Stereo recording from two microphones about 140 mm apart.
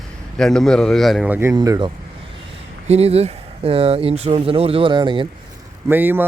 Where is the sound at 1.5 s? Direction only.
30° right (ahead or behind).